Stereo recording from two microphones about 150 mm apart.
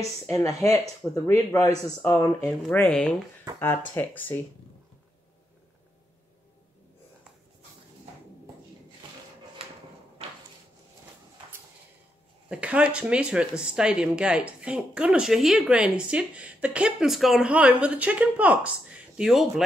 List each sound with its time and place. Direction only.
0.0 s speech: 20° left (ahead or behind)
2.7 s speech: 5° left (ahead or behind)
12.4 s speech: 10° right (ahead or behind)